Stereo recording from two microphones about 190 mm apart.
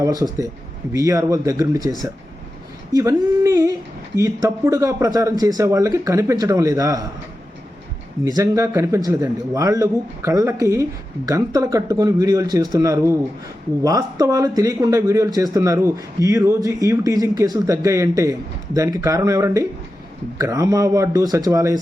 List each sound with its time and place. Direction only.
0.0 s speech: 20° right (ahead or behind)
2.9 s speech: 15° right (ahead or behind)
8.2 s speech: 20° right (ahead or behind)